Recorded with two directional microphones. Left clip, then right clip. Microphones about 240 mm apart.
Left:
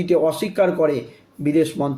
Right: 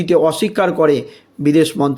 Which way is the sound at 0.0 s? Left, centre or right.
Right.